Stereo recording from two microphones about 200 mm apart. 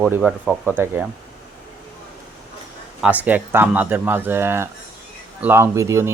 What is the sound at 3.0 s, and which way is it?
Speech, 5° right (ahead or behind).